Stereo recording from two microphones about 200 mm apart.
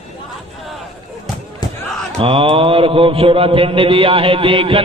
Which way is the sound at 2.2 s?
25° right (ahead or behind).